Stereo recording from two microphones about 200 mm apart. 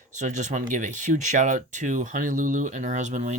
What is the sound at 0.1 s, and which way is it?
Speech, 40° right (ahead or behind).